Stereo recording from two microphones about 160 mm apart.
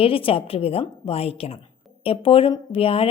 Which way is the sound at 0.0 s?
35° left (ahead or behind).